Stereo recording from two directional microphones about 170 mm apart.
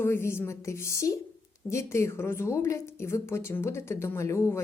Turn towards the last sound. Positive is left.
turn(degrees=15)  # may be behind; listen again after turning